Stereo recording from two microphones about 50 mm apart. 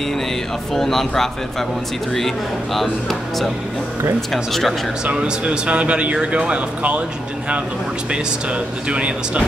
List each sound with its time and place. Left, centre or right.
0.7 s speech: centre
5.0 s speech: right
8.8 s speech: right